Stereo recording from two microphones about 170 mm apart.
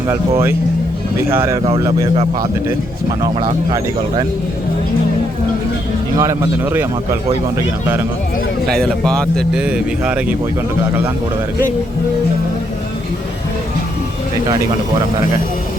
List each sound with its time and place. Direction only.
0.1 s speech: 15° right (ahead or behind)
3.4 s speech: 25° right (ahead or behind)
6.1 s speech: 20° right (ahead or behind)
8.8 s speech: 5° left (ahead or behind)
9.6 s speech: 5° right (ahead or behind)